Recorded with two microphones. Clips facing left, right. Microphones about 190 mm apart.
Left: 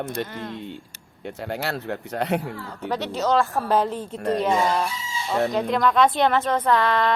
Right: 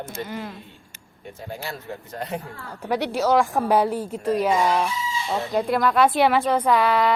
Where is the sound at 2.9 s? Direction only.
10° right (ahead or behind).